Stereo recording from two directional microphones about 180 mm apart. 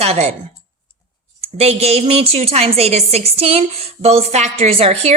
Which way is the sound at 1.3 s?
35° right (ahead or behind).